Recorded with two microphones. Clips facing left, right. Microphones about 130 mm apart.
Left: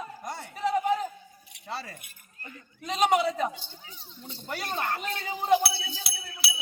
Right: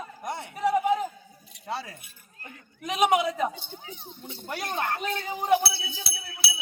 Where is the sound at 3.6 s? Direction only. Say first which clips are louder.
Right 7 dB; 55° right (ahead or behind).